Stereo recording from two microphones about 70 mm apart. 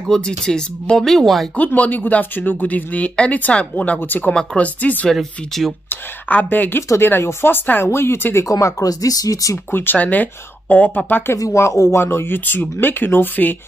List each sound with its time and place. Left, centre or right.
0.1 s speech: centre
1.6 s speech: left
5.1 s speech: centre
5.9 s speech: left
8.5 s speech: left
9.7 s speech: left
11.3 s speech: left